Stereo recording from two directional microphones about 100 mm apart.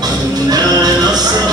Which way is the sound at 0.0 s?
40° right (ahead or behind).